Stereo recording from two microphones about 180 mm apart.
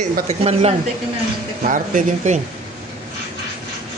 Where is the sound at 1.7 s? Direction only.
45° right (ahead or behind).